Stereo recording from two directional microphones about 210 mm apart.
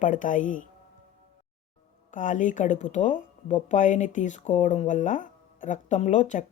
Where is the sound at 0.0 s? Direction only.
40° left (ahead or behind).